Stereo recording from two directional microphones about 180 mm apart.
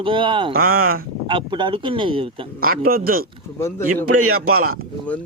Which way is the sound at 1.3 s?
25° right (ahead or behind).